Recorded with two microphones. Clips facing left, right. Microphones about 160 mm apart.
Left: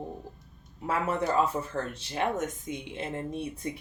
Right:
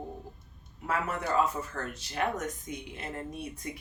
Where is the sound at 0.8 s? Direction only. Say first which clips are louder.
Left 4 dB; 30° left (ahead or behind).